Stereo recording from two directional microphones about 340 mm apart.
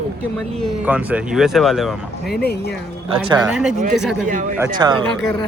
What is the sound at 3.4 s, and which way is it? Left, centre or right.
Speech, centre.